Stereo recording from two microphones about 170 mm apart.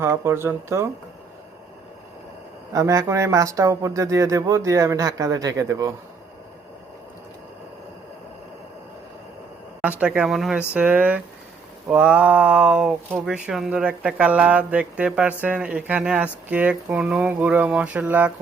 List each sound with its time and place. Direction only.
0.0 s speech: 15° right (ahead or behind)
2.7 s speech: 20° right (ahead or behind)
9.8 s speech: 10° right (ahead or behind)